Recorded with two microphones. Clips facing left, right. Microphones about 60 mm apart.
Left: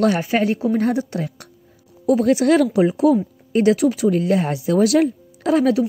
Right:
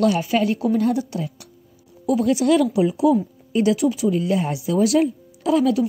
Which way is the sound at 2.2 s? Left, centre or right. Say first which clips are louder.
Left 1 dB; left.